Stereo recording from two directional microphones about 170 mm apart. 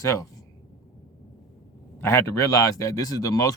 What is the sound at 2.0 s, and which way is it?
Speech, 15° left (ahead or behind).